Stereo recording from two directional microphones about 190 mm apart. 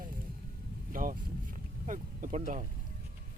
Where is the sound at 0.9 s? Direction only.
45° right (ahead or behind).